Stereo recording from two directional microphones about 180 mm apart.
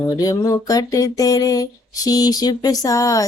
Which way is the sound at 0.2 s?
20° left (ahead or behind).